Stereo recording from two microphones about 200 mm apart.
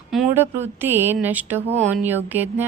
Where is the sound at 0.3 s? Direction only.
10° right (ahead or behind).